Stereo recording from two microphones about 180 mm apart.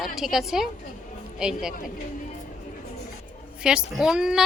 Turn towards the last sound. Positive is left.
turn(degrees=-5)  # may be behind; listen again after turning